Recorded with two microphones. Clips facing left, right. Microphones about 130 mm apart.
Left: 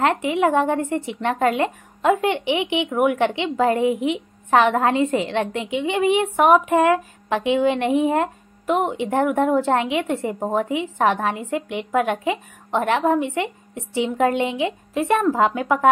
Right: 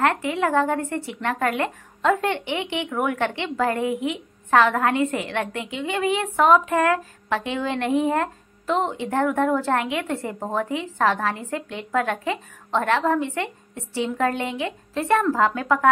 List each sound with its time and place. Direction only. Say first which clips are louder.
0.0 s speech: left 3 dB; 20° left (ahead or behind)